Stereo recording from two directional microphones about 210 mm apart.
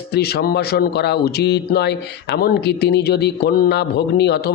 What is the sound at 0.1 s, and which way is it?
Speech, 50° left (ahead or behind).